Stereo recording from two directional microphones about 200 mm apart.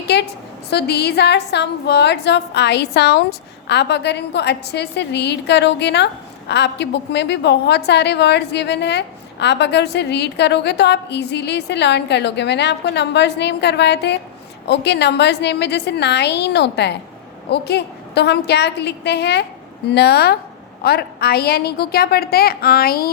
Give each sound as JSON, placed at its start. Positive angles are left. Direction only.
{"t": 0.1, "sound": "a woman's voice", "side_deg": 60}